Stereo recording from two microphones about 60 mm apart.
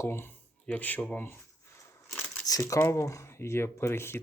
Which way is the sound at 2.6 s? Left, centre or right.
Left.